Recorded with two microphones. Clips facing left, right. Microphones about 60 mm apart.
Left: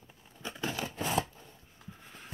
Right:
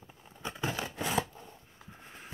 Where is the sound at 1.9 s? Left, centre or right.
Centre.